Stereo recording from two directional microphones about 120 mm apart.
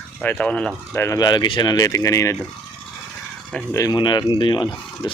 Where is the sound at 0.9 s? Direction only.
20° left (ahead or behind).